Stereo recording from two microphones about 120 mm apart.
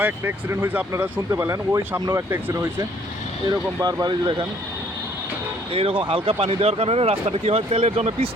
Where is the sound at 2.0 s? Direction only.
35° right (ahead or behind).